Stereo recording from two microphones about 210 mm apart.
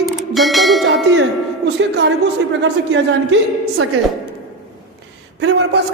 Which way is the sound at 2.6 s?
65° right (ahead or behind).